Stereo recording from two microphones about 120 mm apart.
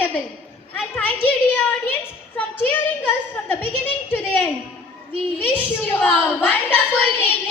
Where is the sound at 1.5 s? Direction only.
15° left (ahead or behind).